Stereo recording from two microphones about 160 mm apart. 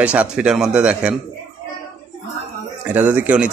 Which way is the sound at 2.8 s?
10° right (ahead or behind).